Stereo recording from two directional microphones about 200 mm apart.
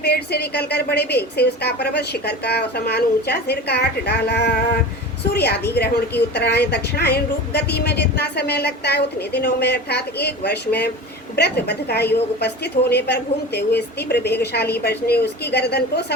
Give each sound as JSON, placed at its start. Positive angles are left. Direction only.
{"t": 0.0, "sound": "a woman's voice", "side_deg": 55}